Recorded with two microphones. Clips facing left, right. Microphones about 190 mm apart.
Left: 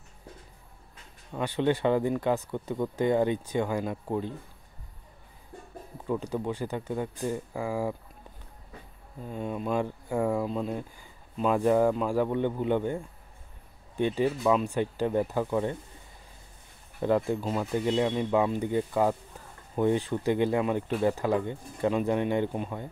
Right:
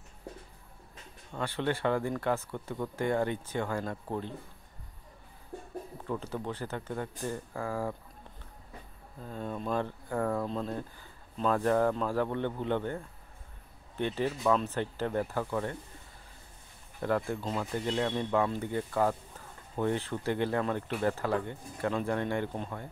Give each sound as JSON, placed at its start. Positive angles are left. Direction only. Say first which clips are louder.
{"t": 1.4, "sound": "speech", "louder": "left 5 dB", "side_deg": 15}
{"t": 6.0, "sound": "speech", "louder": "left 6 dB", "side_deg": 15}
{"t": 9.2, "sound": "speech", "louder": "left 4 dB", "side_deg": 10}
{"t": 17.0, "sound": "speech", "louder": "left 5 dB", "side_deg": 20}